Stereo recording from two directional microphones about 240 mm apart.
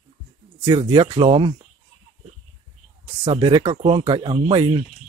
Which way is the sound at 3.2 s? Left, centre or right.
Right.